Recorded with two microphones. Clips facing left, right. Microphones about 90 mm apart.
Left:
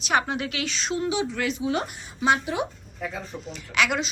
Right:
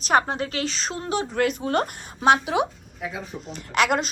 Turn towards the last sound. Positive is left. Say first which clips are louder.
# right 3 dB
turn(degrees=-45)  # may be behind; listen again after turning